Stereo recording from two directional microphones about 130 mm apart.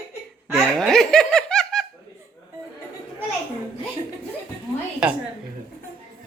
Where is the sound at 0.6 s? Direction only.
5° left (ahead or behind).